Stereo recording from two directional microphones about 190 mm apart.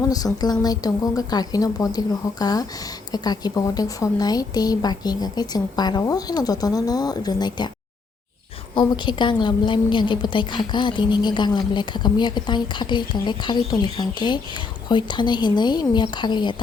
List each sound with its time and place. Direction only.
0.4 s a woman's voice: 20° left (ahead or behind)
8.7 s a woman's voice: 25° left (ahead or behind)